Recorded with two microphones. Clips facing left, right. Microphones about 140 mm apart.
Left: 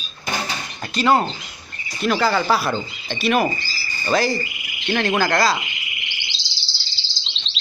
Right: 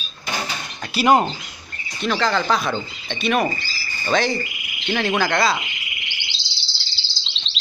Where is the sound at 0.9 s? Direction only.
15° right (ahead or behind).